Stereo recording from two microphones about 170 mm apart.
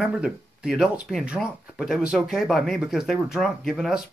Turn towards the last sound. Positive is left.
turn(degrees=-5)  # may be behind; listen again after turning